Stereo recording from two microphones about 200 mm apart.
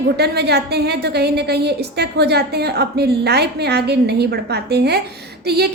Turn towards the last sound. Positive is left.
turn(degrees=-55)  # may be behind; listen again after turning